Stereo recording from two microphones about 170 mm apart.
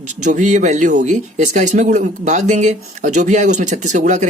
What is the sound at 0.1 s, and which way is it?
Speech, 45° right (ahead or behind).